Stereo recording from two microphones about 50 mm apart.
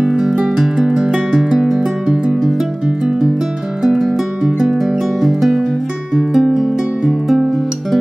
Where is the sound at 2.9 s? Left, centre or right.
Centre.